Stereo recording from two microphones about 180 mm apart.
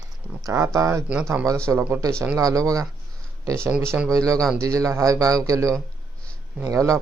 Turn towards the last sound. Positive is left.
turn(degrees=-15)  # may be behind; listen again after turning